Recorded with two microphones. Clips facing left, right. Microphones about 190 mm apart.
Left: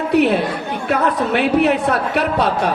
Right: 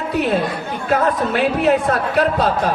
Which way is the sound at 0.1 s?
65° left (ahead or behind).